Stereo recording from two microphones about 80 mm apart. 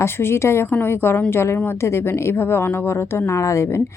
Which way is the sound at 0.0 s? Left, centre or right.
Left.